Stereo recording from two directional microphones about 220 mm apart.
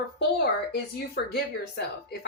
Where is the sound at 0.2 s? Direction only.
50° left (ahead or behind).